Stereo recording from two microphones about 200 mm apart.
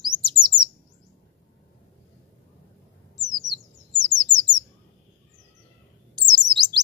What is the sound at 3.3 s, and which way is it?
Bird, 20° right (ahead or behind).